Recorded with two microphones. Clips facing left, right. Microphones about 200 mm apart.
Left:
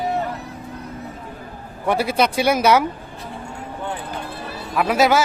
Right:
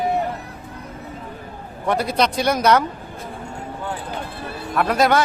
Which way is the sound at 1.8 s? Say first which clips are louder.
Left 1 dB; 5° left (ahead or behind).